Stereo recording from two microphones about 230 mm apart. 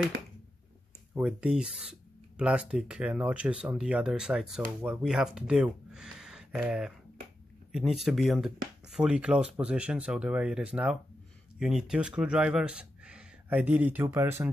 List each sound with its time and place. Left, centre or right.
1.1 s speech: centre